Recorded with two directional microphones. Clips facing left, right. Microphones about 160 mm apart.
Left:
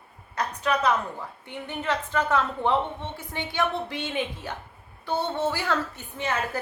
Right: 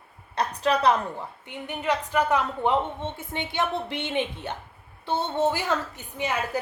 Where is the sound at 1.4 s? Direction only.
15° right (ahead or behind).